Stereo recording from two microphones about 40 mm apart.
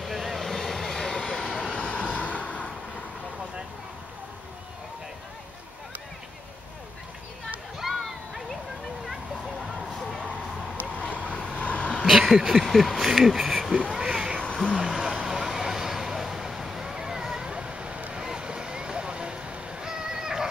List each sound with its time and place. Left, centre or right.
0.0 s vehicle: centre; by 2.4 s left
7.8 s a sound: centre
9.0 s a sound: centre
10.9 s vehicle: left
11.2 s vehicle: left
11.5 s vehicle: left
12.1 s a sound: centre; by 18.0 s right
18.1 s vehicle: centre
19.8 s fowl: centre